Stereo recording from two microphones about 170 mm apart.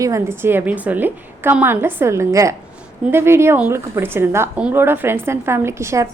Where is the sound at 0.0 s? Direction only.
15° right (ahead or behind).